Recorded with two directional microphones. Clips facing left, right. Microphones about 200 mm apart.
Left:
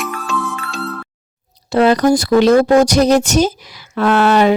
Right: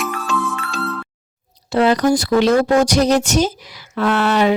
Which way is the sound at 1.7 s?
45° left (ahead or behind).